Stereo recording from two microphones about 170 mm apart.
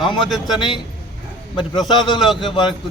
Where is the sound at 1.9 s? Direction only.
25° left (ahead or behind).